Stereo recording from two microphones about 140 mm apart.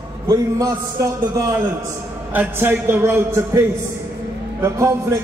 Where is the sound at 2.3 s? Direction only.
15° right (ahead or behind).